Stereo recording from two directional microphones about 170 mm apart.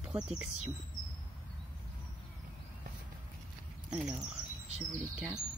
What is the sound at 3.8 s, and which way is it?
Speech, 5° right (ahead or behind).